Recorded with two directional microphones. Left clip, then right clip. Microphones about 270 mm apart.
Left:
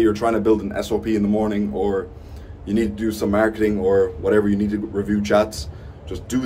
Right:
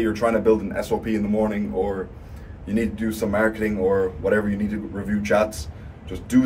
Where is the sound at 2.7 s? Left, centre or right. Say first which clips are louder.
Left 3 dB; centre.